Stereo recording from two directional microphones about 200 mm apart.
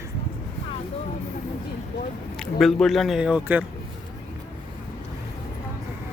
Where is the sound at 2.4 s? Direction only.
Centre (ahead or behind).